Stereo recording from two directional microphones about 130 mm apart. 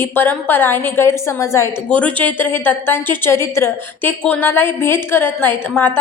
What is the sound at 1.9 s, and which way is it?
A woman's voice, 10° left (ahead or behind).